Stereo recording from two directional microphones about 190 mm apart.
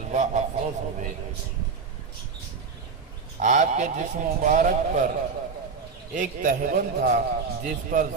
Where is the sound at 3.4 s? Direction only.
40° right (ahead or behind).